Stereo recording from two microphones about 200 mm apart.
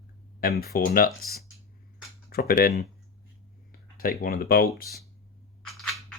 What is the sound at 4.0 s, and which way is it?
Speech, 45° left (ahead or behind).